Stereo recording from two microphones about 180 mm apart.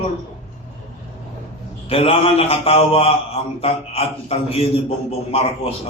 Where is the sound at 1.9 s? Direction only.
30° left (ahead or behind).